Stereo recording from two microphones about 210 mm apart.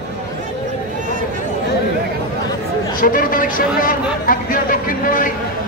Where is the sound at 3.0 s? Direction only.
40° left (ahead or behind).